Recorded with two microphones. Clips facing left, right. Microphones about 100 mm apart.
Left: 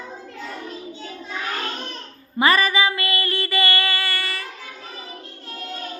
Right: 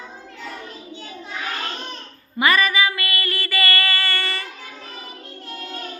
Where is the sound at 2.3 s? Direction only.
30° left (ahead or behind); by 4.5 s 5° left (ahead or behind).